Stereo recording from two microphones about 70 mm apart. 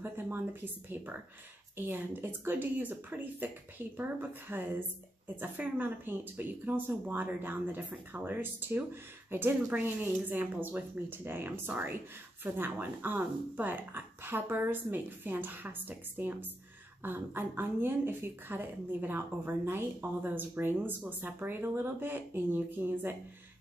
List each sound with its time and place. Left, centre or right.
0.0 s speech: right